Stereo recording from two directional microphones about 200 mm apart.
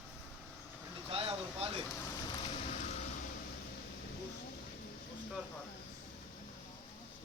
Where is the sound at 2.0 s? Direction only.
20° left (ahead or behind).